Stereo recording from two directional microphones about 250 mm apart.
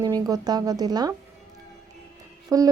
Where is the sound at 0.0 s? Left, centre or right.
Centre.